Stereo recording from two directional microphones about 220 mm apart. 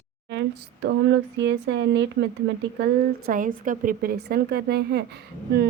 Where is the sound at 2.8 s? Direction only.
40° right (ahead or behind).